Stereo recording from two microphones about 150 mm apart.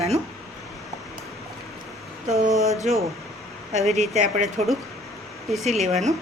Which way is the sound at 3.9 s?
50° right (ahead or behind).